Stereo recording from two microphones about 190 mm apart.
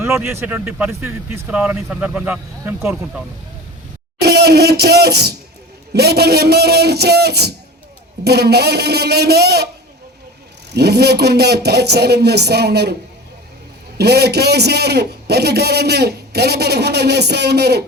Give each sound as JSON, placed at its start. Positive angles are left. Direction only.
{"t": 0.0, "sound": "speech", "side_deg": -15}
{"t": 4.2, "sound": "a man's voice", "side_deg": -55}
{"t": 10.7, "sound": "a man's voice", "side_deg": -60}
{"t": 14.0, "sound": "a man's voice", "side_deg": -60}